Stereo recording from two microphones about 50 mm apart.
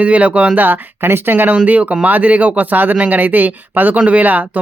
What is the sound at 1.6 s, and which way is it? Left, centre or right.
Speech, right.